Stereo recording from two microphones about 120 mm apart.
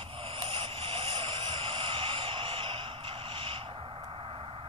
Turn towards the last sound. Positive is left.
turn(degrees=-45)  # may be behind; listen again after turning